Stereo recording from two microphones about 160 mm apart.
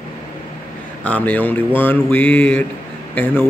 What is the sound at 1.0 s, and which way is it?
Speech, 10° left (ahead or behind).